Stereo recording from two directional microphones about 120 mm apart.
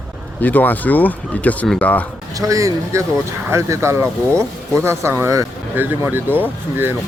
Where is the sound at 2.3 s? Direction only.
30° right (ahead or behind).